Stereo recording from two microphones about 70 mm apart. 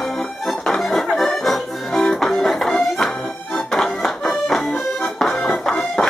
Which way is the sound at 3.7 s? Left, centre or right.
Centre.